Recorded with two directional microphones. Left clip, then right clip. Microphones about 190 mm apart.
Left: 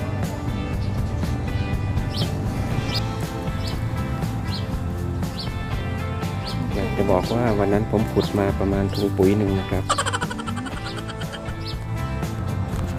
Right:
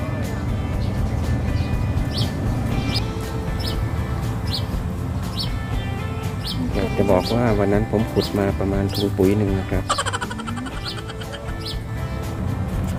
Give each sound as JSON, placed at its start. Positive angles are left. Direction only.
{"t": 7.1, "sound": "speech", "side_deg": 15}
{"t": 7.9, "sound": "speech", "side_deg": 25}
{"t": 9.9, "sound": "music", "side_deg": 0}